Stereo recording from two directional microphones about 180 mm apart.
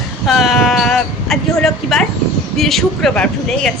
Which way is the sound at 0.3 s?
Centre (ahead or behind).